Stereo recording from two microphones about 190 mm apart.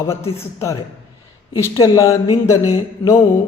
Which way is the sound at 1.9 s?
15° left (ahead or behind).